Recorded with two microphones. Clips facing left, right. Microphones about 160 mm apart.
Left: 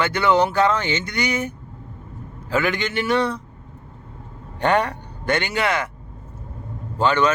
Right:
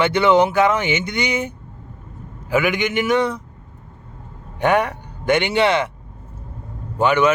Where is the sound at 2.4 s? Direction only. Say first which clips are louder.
Right 3 dB; 15° right (ahead or behind).